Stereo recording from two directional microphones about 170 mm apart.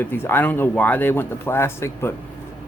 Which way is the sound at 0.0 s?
10° left (ahead or behind).